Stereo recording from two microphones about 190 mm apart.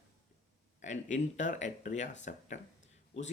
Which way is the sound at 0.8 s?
40° left (ahead or behind).